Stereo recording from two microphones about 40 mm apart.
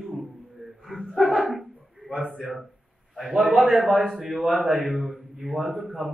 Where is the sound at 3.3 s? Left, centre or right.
Centre.